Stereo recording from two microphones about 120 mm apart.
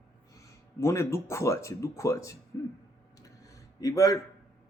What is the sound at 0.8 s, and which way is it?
Speech, 25° left (ahead or behind).